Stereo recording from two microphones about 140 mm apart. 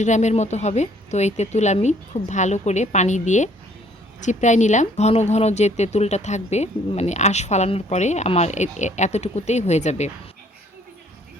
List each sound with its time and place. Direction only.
0.0 s a woman's voice: 55° left (ahead or behind)